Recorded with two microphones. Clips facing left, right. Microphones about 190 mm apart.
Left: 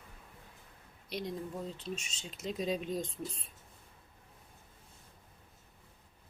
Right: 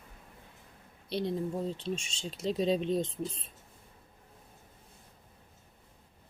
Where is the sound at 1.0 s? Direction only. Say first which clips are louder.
Right 6 dB; 30° right (ahead or behind).